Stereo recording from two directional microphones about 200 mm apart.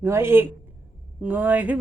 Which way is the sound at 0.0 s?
10° right (ahead or behind).